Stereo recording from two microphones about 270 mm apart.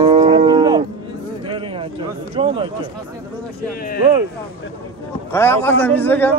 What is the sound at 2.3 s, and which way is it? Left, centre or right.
Speech, centre.